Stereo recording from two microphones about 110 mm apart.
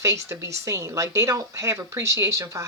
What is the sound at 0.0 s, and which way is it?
Speech, 25° right (ahead or behind).